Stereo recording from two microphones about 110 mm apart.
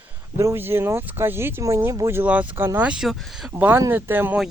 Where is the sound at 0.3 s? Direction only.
25° right (ahead or behind); by 3.2 s 5° right (ahead or behind).